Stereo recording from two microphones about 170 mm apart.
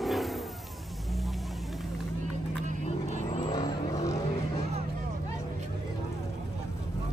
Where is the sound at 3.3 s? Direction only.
35° left (ahead or behind).